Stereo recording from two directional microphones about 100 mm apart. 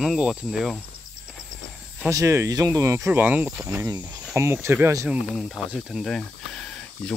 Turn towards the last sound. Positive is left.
turn(degrees=5)  # may be behind; listen again after turning